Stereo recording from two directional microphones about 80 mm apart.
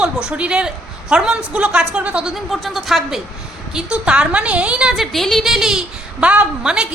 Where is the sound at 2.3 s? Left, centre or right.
Centre.